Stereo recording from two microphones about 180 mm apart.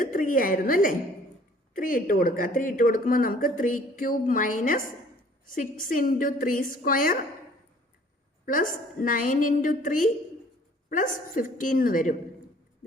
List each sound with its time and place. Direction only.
0.0 s speech: 50° left (ahead or behind)
8.4 s speech: 50° left (ahead or behind)